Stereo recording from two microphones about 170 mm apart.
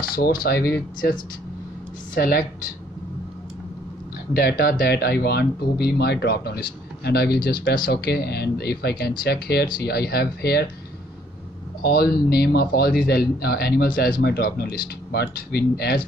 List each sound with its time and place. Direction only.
0.0 s speech: 55° left (ahead or behind)
2.1 s speech: 60° left (ahead or behind)
4.3 s speech: 65° left (ahead or behind)
11.8 s speech: 65° left (ahead or behind)